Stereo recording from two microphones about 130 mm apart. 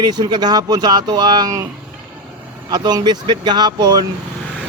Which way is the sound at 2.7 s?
30° right (ahead or behind).